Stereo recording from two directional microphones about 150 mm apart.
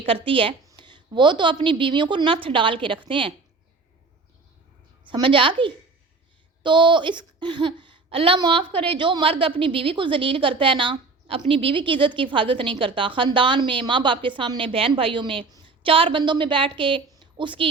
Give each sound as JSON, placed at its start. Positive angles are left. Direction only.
{"t": 0.0, "sound": "a woman's voice", "side_deg": -35}
{"t": 5.0, "sound": "a woman's voice", "side_deg": -35}